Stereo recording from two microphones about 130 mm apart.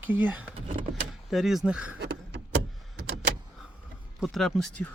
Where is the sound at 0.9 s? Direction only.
Centre (ahead or behind).